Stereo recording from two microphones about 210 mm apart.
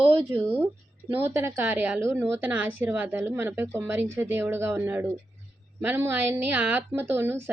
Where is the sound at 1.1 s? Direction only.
10° right (ahead or behind).